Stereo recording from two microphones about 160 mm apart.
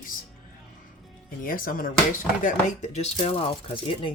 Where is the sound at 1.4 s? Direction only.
60° left (ahead or behind); by 3.5 s 40° left (ahead or behind).